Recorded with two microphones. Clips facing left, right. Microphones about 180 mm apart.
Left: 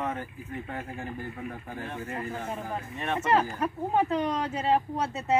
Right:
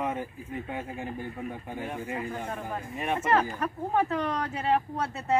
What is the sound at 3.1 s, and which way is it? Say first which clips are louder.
Speech: left 1 dB; 20° left (ahead or behind).